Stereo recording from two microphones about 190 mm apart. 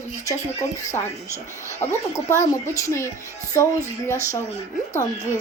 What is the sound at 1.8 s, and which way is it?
Speech, 15° left (ahead or behind).